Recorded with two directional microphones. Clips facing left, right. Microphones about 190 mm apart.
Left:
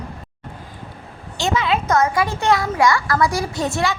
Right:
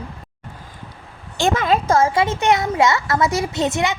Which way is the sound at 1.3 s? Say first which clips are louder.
Right 2 dB; 50° right (ahead or behind).